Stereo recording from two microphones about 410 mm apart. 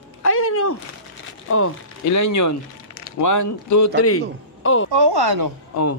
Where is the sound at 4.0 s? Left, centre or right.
Left.